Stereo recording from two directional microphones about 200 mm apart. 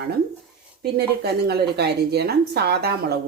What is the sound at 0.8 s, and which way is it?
A woman's voice, 55° right (ahead or behind).